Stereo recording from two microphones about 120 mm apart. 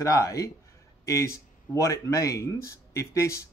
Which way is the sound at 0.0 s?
25° left (ahead or behind).